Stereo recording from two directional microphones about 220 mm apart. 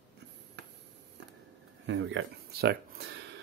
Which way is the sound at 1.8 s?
55° right (ahead or behind).